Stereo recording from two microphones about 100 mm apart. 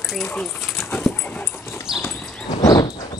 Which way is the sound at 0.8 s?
25° left (ahead or behind).